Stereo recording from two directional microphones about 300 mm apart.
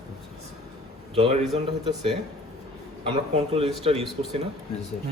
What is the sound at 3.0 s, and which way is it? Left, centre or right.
Speech, centre.